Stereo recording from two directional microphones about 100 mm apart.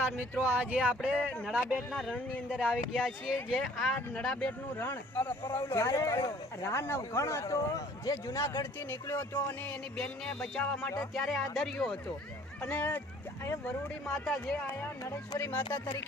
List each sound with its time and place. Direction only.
0.5 s speech: 15° right (ahead or behind)
1.7 s speech: 5° left (ahead or behind)
2.5 s speech: 10° right (ahead or behind); by 4.5 s 10° left (ahead or behind)
4.8 s speech: 20° left (ahead or behind)
10.0 s speech: 5° left (ahead or behind)
12.6 s speech: 15° left (ahead or behind)
14.1 s speech: 5° left (ahead or behind)